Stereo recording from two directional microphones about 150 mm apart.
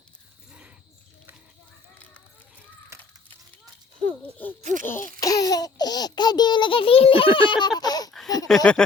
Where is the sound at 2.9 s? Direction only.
20° right (ahead or behind).